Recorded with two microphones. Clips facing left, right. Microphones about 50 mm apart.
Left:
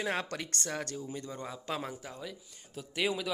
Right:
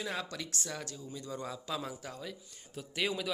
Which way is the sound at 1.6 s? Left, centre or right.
Left.